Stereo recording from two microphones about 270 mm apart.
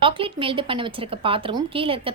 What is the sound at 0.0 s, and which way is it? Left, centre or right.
A woman's voice, centre.